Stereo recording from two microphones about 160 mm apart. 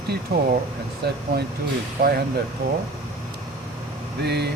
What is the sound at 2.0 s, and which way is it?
Speech, 70° right (ahead or behind).